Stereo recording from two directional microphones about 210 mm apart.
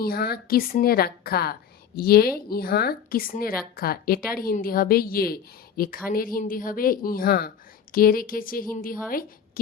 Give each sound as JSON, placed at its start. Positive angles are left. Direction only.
{"t": 0.0, "sound": "a woman's voice", "side_deg": 45}